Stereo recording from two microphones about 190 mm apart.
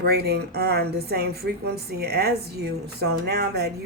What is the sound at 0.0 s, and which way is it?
A woman's voice, 55° right (ahead or behind).